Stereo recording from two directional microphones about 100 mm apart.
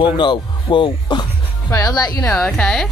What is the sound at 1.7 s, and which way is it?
Speech, 40° left (ahead or behind).